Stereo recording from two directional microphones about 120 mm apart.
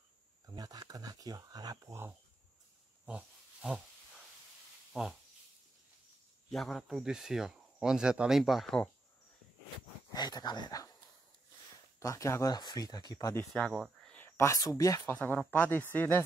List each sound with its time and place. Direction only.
0.5 s speech: 30° right (ahead or behind)
3.1 s speech: 10° right (ahead or behind)
6.5 s speech: centre (ahead or behind)
10.1 s speech: 35° left (ahead or behind)
12.0 s speech: 25° left (ahead or behind)
13.5 s speech: 5° left (ahead or behind)
14.1 s speech: 20° left (ahead or behind)
15.1 s speech: 15° left (ahead or behind)